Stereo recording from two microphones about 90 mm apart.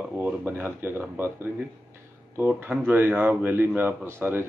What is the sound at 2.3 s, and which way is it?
Speech, 20° right (ahead or behind).